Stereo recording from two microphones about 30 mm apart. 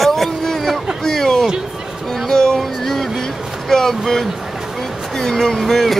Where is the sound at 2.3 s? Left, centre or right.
Left.